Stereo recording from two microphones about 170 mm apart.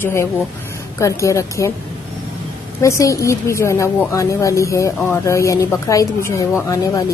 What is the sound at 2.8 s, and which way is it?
Speech, 20° left (ahead or behind).